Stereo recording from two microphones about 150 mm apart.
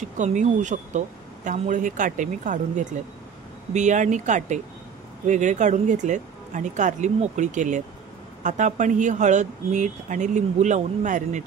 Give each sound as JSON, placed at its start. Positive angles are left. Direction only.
{"t": 0.2, "sound": "speech", "side_deg": -55}